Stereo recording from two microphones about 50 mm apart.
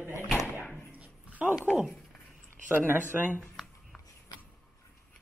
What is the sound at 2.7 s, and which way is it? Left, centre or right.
Speech, right.